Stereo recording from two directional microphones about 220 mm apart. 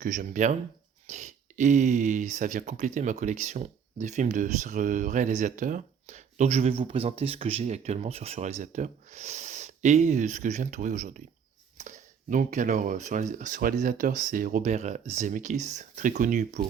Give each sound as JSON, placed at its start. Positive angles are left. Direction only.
{"t": 0.0, "sound": "speech", "side_deg": -35}